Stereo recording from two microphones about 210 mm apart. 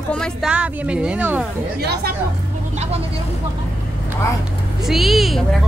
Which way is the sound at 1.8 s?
50° right (ahead or behind).